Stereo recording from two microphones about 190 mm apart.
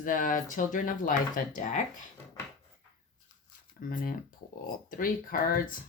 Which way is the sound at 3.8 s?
45° left (ahead or behind).